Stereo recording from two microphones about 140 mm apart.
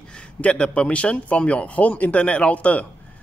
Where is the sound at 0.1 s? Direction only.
10° left (ahead or behind).